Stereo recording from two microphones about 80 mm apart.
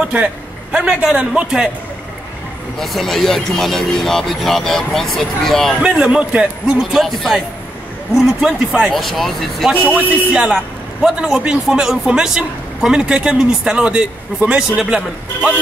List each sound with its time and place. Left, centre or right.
0.0 s a man's voice: centre
2.8 s speech: centre
5.8 s a man's voice: centre
6.8 s speech: centre
9.9 s a man's voice: centre